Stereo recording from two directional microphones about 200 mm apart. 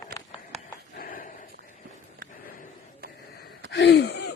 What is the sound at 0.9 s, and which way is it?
Dog, 45° left (ahead or behind).